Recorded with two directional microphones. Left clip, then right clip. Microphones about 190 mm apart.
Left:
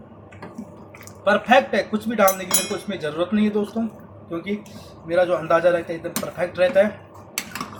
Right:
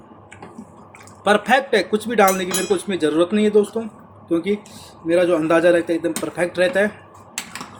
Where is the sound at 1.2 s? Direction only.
55° right (ahead or behind).